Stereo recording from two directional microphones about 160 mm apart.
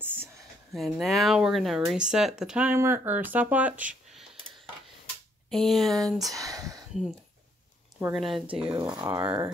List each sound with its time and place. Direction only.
0.0 s a sound: 10° right (ahead or behind)
0.7 s speech: centre (ahead or behind)
5.5 s speech: centre (ahead or behind)
6.3 s a sound: 20° right (ahead or behind)
8.1 s speech: centre (ahead or behind)
8.9 s speech: 25° right (ahead or behind)
9.2 s speech: 10° right (ahead or behind)